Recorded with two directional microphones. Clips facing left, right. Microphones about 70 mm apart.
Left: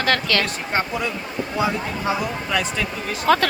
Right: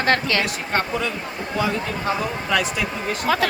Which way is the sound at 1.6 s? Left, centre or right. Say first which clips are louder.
Even; centre.